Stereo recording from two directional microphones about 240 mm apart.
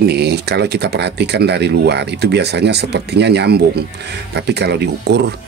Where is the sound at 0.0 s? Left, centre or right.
Right.